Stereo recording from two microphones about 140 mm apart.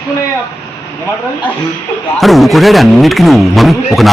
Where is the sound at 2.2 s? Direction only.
Centre (ahead or behind).